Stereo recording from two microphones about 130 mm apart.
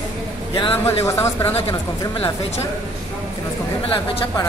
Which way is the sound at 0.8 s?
20° left (ahead or behind).